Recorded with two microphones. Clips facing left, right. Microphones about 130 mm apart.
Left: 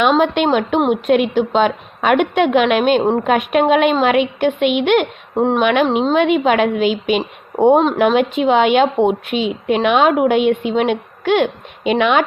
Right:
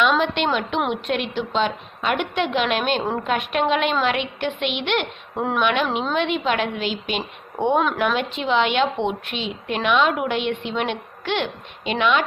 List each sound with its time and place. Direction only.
0.1 s a woman's voice: 45° left (ahead or behind)
5.3 s speech: 30° left (ahead or behind)
5.5 s a woman's voice: 45° left (ahead or behind)